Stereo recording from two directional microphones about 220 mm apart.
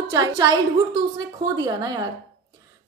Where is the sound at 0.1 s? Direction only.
15° right (ahead or behind).